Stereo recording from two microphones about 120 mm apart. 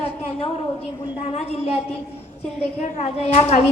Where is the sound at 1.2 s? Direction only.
60° left (ahead or behind).